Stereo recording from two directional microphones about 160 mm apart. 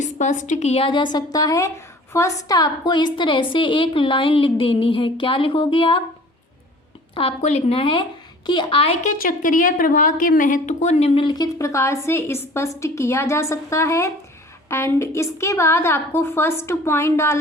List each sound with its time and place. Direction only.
0.0 s a woman's voice: 50° left (ahead or behind); by 6.0 s 30° left (ahead or behind)
7.1 s a woman's voice: 35° left (ahead or behind)
9.0 s a woman's voice: 60° left (ahead or behind); by 17.3 s 15° left (ahead or behind)